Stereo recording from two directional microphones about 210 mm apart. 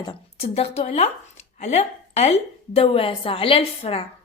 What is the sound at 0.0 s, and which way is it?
Speech, 25° left (ahead or behind).